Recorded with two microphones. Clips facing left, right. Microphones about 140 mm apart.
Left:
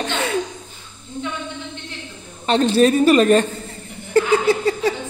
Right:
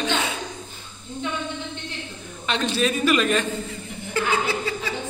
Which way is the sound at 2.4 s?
35° left (ahead or behind).